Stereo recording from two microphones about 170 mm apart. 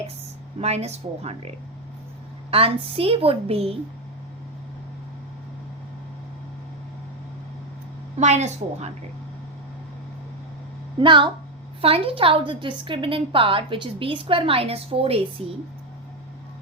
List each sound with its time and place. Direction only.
0.6 s a woman's voice: 40° right (ahead or behind)
2.5 s a woman's voice: 35° right (ahead or behind)
8.2 s a woman's voice: 40° right (ahead or behind)
11.0 s a woman's voice: 30° right (ahead or behind)